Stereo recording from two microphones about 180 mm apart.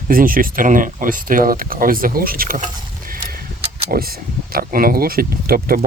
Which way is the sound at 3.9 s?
55° right (ahead or behind).